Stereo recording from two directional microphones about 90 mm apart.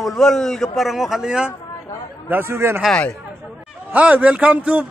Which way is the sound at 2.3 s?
30° right (ahead or behind).